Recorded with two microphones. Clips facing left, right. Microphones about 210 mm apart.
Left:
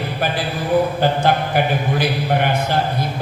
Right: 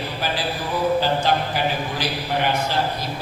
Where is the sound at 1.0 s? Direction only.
55° left (ahead or behind).